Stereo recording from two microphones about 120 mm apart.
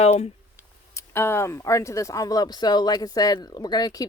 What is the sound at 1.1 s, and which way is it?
Speech, 20° left (ahead or behind).